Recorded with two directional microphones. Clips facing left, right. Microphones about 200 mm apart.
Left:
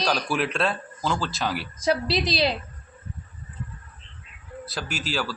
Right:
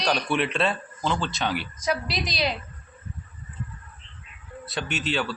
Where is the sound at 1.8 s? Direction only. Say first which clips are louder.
Left 6 dB; 30° left (ahead or behind).